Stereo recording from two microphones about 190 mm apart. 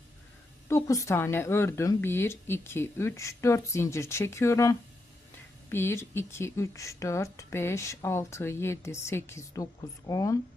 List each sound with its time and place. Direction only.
0.7 s speech: 15° left (ahead or behind)